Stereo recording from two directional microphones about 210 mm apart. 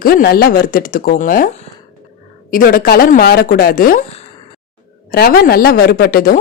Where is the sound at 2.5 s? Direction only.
40° left (ahead or behind).